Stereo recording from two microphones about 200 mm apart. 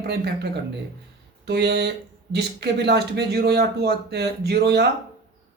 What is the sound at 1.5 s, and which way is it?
Speech, 55° right (ahead or behind).